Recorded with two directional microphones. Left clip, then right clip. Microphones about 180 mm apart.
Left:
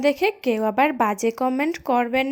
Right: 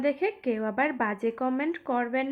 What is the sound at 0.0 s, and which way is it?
Speech, 40° left (ahead or behind).